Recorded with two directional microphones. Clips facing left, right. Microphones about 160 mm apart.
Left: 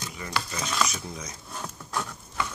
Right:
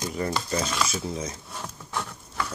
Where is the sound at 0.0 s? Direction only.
40° right (ahead or behind).